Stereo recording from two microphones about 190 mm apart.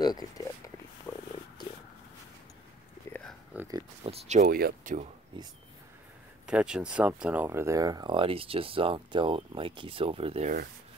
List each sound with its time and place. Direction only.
0.0 s speech: 20° left (ahead or behind)
1.1 s a sound: 10° left (ahead or behind)
3.5 s a sound: 20° right (ahead or behind)
4.0 s speech: 35° right (ahead or behind); by 4.9 s 50° right (ahead or behind)
5.3 s speech: 25° right (ahead or behind)
6.4 s speech: 5° right (ahead or behind); by 10.7 s 40° right (ahead or behind)